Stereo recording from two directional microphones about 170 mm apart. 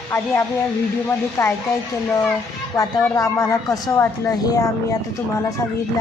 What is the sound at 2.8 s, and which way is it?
A woman's voice, 20° left (ahead or behind).